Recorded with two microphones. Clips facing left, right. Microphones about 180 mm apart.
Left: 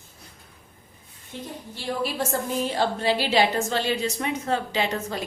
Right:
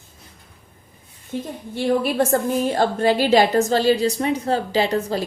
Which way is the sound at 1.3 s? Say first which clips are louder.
Right 9 dB; 55° right (ahead or behind).